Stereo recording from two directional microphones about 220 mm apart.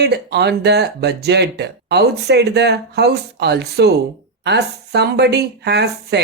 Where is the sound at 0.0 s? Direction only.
50° right (ahead or behind).